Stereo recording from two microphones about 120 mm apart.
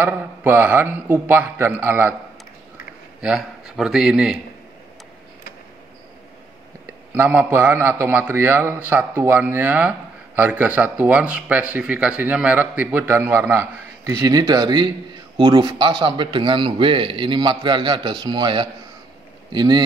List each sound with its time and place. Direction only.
0.0 s a man's voice: 20° right (ahead or behind)
3.2 s a man's voice: 5° right (ahead or behind)
7.2 s a man's voice: 15° right (ahead or behind); by 19.8 s 35° right (ahead or behind)